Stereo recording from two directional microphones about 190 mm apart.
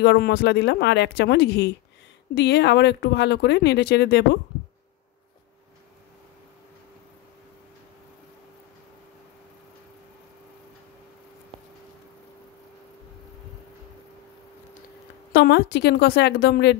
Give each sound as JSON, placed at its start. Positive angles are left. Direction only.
{"t": 0.0, "sound": "speech", "side_deg": 60}
{"t": 15.3, "sound": "speech", "side_deg": 60}